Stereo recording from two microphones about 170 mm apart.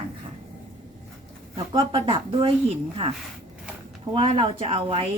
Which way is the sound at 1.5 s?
30° right (ahead or behind).